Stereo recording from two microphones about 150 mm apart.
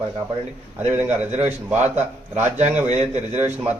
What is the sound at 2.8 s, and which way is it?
Speech, 50° right (ahead or behind).